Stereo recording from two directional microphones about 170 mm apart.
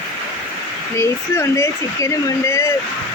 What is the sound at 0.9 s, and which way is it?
Speech, 15° left (ahead or behind).